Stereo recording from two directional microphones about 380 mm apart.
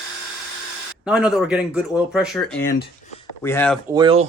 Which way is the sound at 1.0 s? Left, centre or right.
Centre.